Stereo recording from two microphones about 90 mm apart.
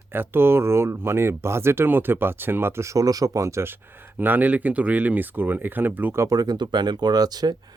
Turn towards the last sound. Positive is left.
turn(degrees=-50)  # may be behind; listen again after turning